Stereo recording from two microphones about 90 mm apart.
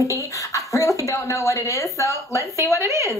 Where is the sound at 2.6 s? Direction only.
30° right (ahead or behind).